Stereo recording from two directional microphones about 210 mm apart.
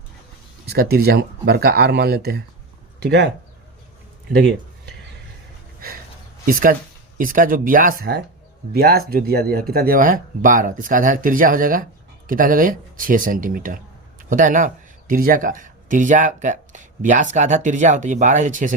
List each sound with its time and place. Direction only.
0.7 s speech: 50° right (ahead or behind)
4.3 s speech: 55° right (ahead or behind)
6.4 s speech: 40° right (ahead or behind)